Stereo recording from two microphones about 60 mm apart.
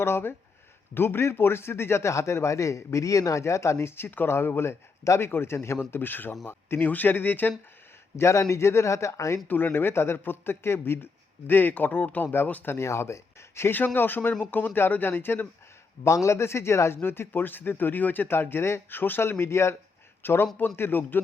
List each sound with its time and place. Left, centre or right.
0.0 s a man's voice: left
5.0 s a man's voice: left
8.1 s speech: left
9.5 s speech: left
12.7 s speech: left
13.7 s speech: left
16.0 s a man's voice: left
17.0 s speech: left